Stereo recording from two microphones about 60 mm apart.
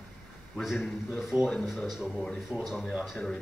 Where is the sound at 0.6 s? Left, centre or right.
Centre.